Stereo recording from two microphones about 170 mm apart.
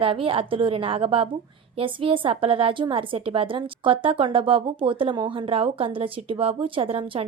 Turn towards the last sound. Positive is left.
turn(degrees=-30)  # may be behind; listen again after turning